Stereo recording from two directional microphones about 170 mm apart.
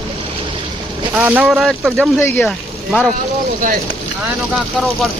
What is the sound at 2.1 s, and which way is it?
Speech, 15° left (ahead or behind).